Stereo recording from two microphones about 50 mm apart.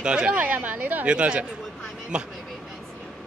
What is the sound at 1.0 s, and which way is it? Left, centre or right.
Speech, right.